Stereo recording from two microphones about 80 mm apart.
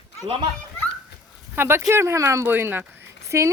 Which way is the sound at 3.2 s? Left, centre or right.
Right.